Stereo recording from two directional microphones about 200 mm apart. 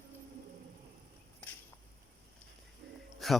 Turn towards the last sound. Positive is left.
turn(degrees=0)  # may be behind; listen again after turning